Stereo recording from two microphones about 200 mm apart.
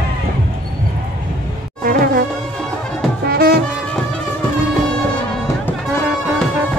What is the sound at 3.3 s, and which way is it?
Music, 50° right (ahead or behind).